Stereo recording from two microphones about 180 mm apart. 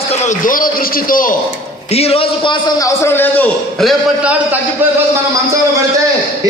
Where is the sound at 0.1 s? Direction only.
40° left (ahead or behind).